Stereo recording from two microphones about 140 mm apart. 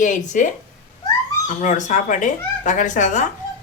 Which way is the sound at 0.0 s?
65° left (ahead or behind).